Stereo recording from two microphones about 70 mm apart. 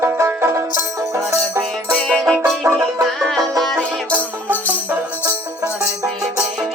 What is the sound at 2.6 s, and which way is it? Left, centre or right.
Music, right.